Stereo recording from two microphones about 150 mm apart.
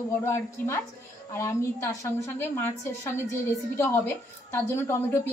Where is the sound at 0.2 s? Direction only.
20° left (ahead or behind).